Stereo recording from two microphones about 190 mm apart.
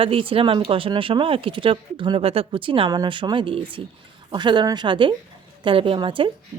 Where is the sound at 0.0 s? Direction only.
30° right (ahead or behind).